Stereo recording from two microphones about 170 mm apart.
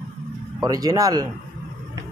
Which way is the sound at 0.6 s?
20° right (ahead or behind).